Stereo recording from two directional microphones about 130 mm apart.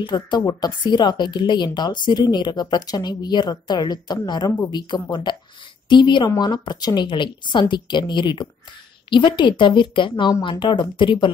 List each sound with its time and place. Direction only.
0.0 s speech: 35° left (ahead or behind)